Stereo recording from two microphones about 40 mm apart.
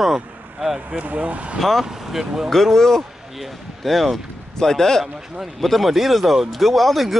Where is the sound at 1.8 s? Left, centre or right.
Centre.